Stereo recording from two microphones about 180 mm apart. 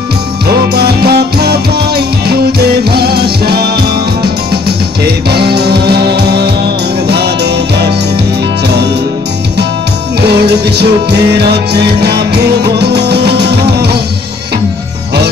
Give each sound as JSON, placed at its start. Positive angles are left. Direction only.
{"t": 0.7, "sound": "music", "side_deg": -60}
{"t": 10.2, "sound": "music", "side_deg": -65}